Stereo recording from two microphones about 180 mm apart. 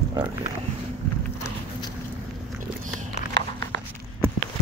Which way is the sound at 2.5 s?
45° right (ahead or behind).